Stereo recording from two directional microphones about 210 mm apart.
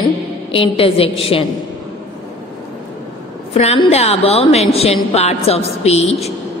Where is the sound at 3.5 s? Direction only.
30° left (ahead or behind).